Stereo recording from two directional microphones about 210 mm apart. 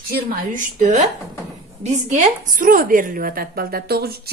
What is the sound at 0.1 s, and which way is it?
A woman's voice, 40° right (ahead or behind).